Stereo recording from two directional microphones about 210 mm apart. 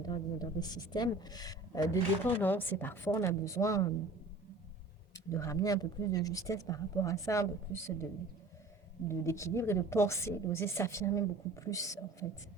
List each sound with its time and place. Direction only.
0.0 s a woman's voice: 20° left (ahead or behind)
5.1 s a woman's voice: 15° left (ahead or behind)
9.0 s a woman's voice: 15° left (ahead or behind)